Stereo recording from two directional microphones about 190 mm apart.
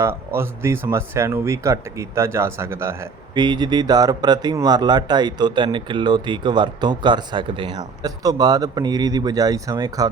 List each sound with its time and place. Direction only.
0.0 s speech: 10° right (ahead or behind)